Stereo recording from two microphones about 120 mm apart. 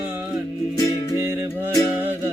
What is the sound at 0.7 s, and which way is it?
Music, 25° left (ahead or behind).